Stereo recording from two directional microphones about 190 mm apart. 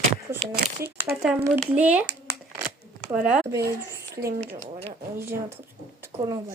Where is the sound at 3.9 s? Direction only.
15° right (ahead or behind).